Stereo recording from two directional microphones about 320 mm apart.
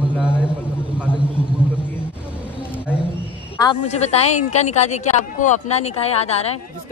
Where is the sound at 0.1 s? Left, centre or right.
Centre.